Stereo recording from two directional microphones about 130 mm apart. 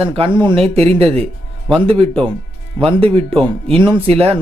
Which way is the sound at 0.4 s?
45° right (ahead or behind).